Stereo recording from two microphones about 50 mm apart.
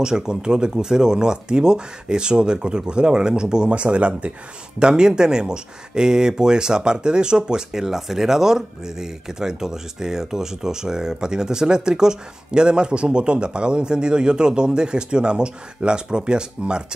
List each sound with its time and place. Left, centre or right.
0.0 s speech: centre